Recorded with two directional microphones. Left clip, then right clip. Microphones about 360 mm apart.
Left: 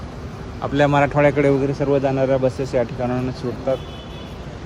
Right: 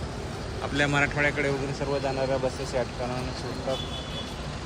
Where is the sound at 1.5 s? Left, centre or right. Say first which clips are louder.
Left 10 dB; left.